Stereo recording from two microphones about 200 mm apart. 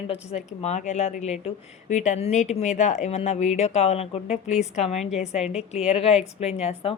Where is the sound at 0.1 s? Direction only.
30° left (ahead or behind).